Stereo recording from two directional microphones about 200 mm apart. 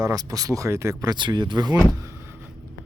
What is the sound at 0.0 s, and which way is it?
Speech, 20° right (ahead or behind).